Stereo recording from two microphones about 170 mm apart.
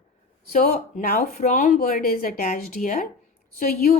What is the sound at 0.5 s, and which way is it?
A woman's voice, 55° left (ahead or behind).